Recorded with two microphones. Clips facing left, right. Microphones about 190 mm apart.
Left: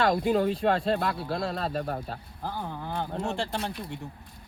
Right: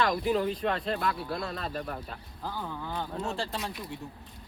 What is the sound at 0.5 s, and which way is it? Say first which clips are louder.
Speech: left 5 dB; 30° left (ahead or behind).